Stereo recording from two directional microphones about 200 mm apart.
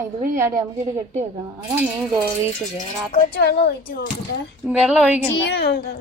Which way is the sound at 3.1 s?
50° left (ahead or behind).